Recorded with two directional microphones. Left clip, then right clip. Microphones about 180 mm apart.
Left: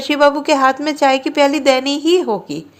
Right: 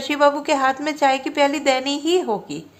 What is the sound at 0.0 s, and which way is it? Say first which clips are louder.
A woman's voice: left 4 dB; 30° left (ahead or behind).